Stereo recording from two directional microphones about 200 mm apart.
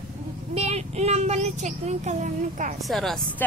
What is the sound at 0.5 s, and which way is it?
Speech, 30° right (ahead or behind).